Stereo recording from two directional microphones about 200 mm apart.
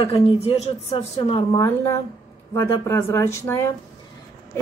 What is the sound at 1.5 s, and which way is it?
Speech, 15° left (ahead or behind).